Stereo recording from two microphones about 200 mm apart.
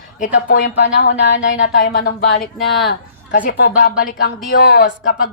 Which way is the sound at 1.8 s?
50° left (ahead or behind).